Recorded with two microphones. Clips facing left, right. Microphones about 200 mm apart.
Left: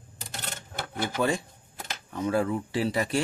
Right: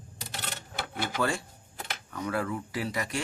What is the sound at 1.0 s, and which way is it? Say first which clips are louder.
A man's voice: left 4 dB; 20° left (ahead or behind).